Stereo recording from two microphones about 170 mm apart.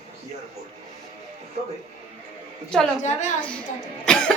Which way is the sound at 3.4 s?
5° left (ahead or behind).